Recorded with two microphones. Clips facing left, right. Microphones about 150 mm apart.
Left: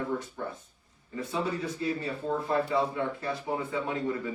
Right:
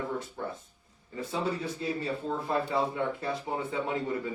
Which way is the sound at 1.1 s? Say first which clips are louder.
Even; 30° right (ahead or behind).